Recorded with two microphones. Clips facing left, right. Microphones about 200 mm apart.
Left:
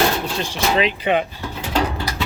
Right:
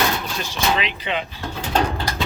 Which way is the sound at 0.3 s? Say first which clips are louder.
Left 3 dB; 30° left (ahead or behind).